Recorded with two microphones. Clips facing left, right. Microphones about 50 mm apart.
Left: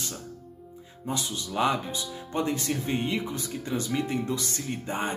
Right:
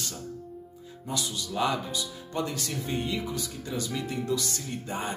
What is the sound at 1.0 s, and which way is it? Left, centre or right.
Speech, left.